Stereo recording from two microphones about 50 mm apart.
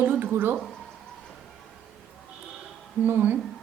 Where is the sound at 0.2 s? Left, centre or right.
Right.